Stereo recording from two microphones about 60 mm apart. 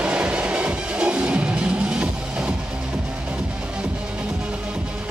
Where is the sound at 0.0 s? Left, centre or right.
Centre.